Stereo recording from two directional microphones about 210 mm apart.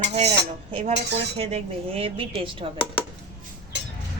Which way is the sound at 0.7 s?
30° right (ahead or behind).